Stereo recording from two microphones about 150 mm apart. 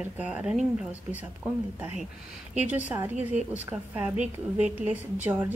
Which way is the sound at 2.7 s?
10° right (ahead or behind).